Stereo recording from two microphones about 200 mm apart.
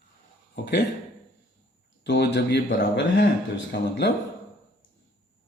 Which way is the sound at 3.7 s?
60° left (ahead or behind).